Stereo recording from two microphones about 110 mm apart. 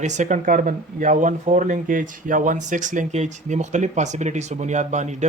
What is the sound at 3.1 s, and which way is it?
Speech, 90° right.